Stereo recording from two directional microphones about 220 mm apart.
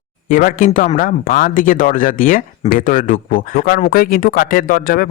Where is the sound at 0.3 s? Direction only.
40° left (ahead or behind).